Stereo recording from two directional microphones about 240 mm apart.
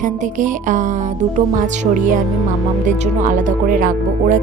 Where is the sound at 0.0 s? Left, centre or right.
Right.